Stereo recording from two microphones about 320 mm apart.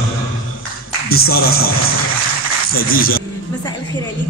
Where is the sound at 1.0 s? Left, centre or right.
Left.